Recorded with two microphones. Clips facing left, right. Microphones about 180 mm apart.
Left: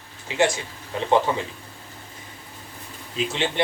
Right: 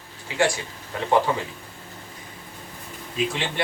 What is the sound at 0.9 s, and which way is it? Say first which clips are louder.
Speech: left 2 dB; 25° left (ahead or behind).